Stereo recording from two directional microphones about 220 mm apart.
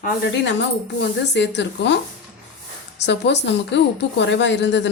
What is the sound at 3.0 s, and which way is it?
Speech, 50° left (ahead or behind).